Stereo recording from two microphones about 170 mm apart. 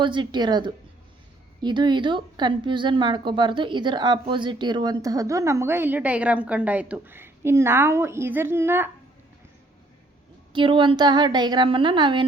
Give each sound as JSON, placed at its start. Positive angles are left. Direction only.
{"t": 0.0, "sound": "a woman's voice", "side_deg": -30}
{"t": 10.5, "sound": "a woman's voice", "side_deg": -30}